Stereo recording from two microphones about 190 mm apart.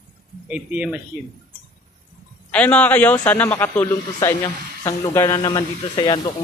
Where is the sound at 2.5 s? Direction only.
5° left (ahead or behind).